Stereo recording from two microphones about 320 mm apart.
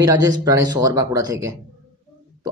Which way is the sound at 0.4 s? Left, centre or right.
Centre.